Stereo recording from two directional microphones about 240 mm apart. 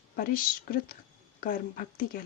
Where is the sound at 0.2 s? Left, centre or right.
Left.